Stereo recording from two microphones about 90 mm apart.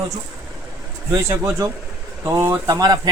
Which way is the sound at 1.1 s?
35° right (ahead or behind).